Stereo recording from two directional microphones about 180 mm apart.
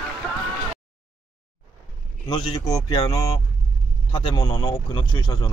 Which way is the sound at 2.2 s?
25° left (ahead or behind).